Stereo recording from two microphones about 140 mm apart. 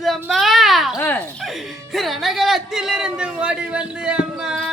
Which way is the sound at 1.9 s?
Centre (ahead or behind).